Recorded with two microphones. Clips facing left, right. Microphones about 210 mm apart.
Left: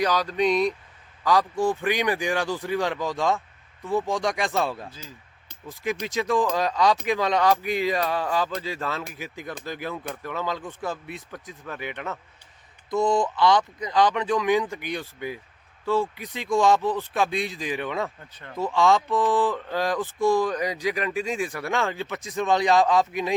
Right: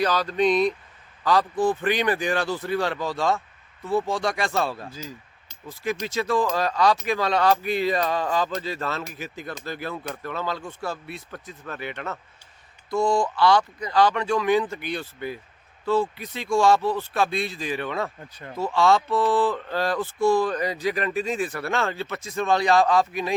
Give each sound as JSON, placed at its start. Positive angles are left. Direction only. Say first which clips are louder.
{"t": 0.0, "sound": "speech", "louder": "right 1 dB", "side_deg": 15}